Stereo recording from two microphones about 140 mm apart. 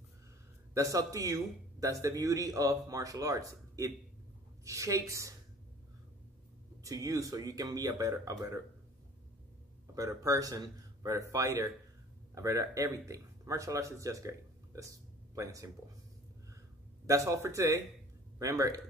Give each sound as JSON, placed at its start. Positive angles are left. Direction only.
{"t": 0.7, "sound": "a man's voice", "side_deg": -25}
{"t": 6.8, "sound": "a man's voice", "side_deg": -25}
{"t": 9.9, "sound": "a man's voice", "side_deg": -25}
{"t": 15.3, "sound": "a man's voice", "side_deg": -25}
{"t": 17.0, "sound": "a man's voice", "side_deg": -20}